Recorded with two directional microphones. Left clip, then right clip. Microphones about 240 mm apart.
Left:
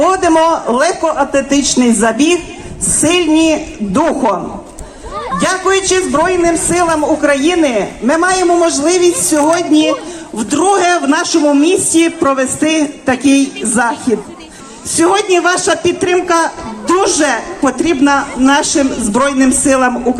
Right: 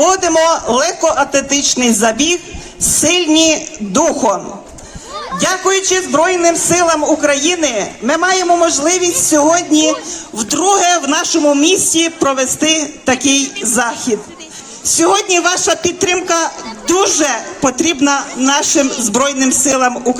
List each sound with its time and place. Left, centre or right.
0.0 s a man's voice: right
5.4 s a man's voice: right
14.9 s a man's voice: right